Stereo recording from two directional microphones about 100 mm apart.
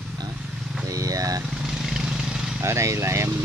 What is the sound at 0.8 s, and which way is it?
Vehicle, 35° right (ahead or behind).